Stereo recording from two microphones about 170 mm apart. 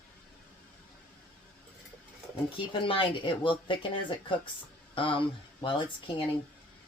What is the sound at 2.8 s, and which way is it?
Speech, 30° left (ahead or behind).